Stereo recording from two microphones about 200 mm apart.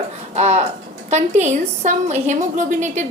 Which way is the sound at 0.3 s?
35° right (ahead or behind).